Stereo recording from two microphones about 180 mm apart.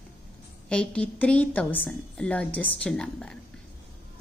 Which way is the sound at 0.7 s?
5° left (ahead or behind).